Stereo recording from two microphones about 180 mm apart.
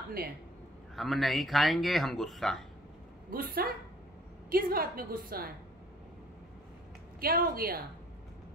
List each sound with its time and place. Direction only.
0.9 s speech: centre (ahead or behind)
3.3 s a woman's voice: 55° right (ahead or behind)
7.2 s a woman's voice: 55° right (ahead or behind)